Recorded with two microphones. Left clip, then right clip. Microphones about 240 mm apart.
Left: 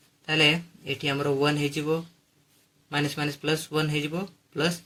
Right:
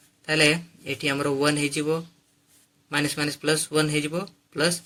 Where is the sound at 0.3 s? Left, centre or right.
Centre.